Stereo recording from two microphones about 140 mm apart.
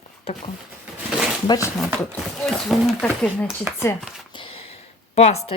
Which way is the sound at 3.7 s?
15° right (ahead or behind).